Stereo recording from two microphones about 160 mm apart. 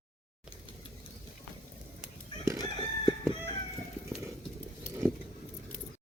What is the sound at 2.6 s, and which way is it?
Chicken, 30° left (ahead or behind).